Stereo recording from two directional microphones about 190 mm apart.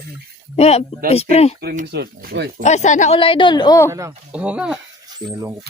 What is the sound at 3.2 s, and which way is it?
Speech, 25° left (ahead or behind).